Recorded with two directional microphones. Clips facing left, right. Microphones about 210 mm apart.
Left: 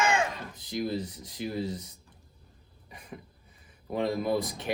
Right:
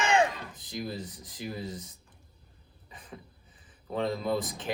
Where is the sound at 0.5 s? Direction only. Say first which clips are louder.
Left 5 dB; 15° right (ahead or behind).